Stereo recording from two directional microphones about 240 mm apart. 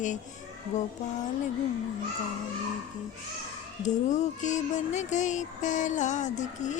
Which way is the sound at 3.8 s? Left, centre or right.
Left.